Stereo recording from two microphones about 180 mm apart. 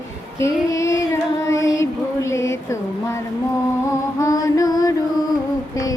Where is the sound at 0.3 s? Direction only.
15° left (ahead or behind).